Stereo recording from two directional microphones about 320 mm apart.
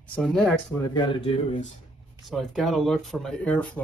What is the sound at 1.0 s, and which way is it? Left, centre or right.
Speech, centre.